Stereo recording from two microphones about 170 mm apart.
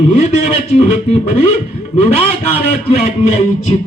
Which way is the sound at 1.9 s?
35° left (ahead or behind).